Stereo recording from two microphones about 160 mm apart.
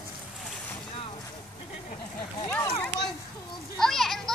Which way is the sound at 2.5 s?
20° left (ahead or behind).